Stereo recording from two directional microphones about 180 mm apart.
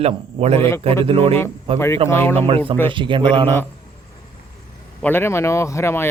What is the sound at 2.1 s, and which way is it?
Speech, 15° left (ahead or behind).